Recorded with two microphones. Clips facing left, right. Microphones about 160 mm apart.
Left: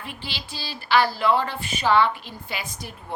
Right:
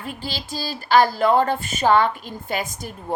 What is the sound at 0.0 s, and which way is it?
Speech, 40° right (ahead or behind).